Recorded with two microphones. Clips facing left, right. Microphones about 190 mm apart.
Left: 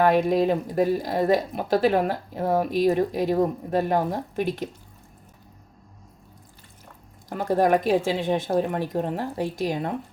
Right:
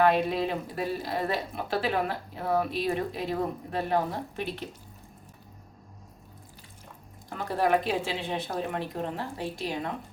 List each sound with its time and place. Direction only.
0.0 s speech: 45° left (ahead or behind)
7.3 s speech: 40° left (ahead or behind)